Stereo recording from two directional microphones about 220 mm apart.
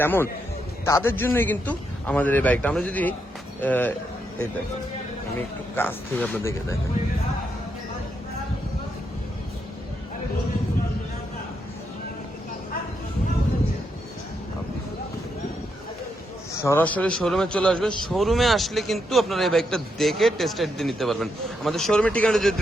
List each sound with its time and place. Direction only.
0.0 s a man's voice: 10° left (ahead or behind)
5.7 s a man's voice: 10° left (ahead or behind)
16.6 s a man's voice: 10° left (ahead or behind)